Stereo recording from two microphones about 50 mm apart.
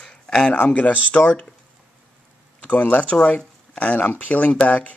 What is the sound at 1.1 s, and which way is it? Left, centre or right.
Speech, left.